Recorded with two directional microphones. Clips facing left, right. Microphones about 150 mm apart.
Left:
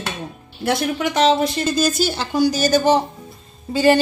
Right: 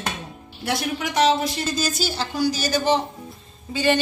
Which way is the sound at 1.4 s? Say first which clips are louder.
Left 6 dB; 55° left (ahead or behind).